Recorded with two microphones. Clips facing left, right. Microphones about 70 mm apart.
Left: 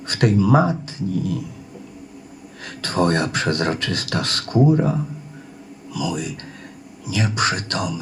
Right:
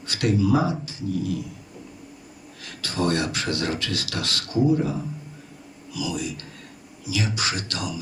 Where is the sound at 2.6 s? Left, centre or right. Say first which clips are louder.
Left 5 dB; left.